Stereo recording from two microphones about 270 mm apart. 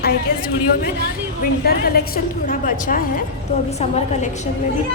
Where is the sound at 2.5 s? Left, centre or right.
Left.